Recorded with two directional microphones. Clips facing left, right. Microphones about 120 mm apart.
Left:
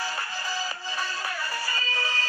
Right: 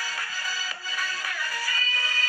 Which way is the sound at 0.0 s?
25° left (ahead or behind).